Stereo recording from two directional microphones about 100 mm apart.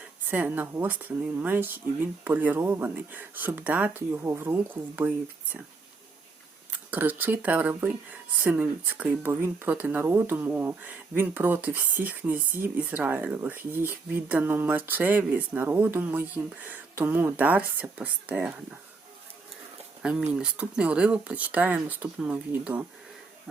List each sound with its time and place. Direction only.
0.3 s speech: 15° right (ahead or behind)
6.9 s speech: 20° right (ahead or behind)
20.0 s speech: 5° right (ahead or behind)